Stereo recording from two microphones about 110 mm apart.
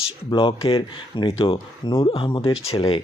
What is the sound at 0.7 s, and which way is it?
Speech, 55° left (ahead or behind).